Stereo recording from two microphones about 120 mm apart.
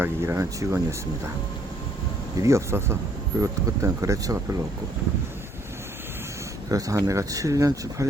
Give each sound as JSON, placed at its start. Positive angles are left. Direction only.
{"t": 0.0, "sound": "speech", "side_deg": -20}
{"t": 2.4, "sound": "speech", "side_deg": -25}
{"t": 6.7, "sound": "speech", "side_deg": -30}